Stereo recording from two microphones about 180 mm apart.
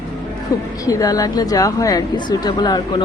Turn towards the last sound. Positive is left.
turn(degrees=25)  # may be behind; listen again after turning